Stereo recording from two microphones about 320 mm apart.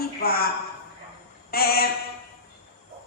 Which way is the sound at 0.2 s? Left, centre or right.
Left.